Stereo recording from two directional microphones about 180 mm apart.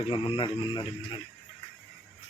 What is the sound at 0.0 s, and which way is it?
Speech, 30° left (ahead or behind).